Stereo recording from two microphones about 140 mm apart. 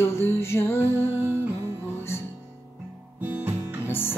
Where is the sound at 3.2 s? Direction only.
15° right (ahead or behind).